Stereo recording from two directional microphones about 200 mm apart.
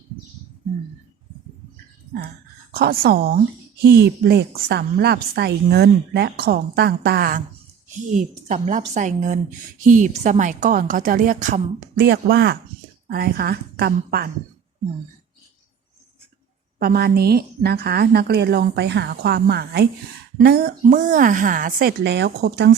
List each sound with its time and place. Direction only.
2.7 s a woman's voice: 50° right (ahead or behind)
8.1 s a woman's voice: 40° right (ahead or behind)
12.0 s a woman's voice: 55° right (ahead or behind)
16.7 s a woman's voice: 50° right (ahead or behind)